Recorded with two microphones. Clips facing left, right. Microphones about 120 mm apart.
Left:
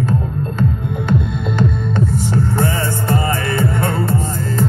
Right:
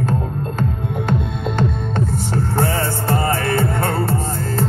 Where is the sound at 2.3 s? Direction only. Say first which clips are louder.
Right 1 dB; 40° right (ahead or behind).